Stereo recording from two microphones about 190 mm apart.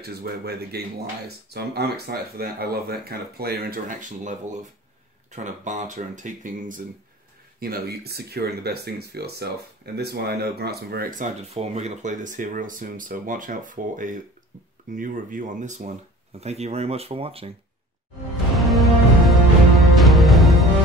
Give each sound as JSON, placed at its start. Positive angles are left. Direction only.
{"t": 0.0, "sound": "speech", "side_deg": -55}
{"t": 7.6, "sound": "speech", "side_deg": -55}
{"t": 18.7, "sound": "music", "side_deg": 0}